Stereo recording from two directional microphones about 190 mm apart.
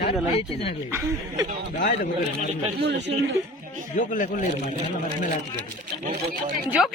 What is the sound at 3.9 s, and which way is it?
Speech, 45° left (ahead or behind).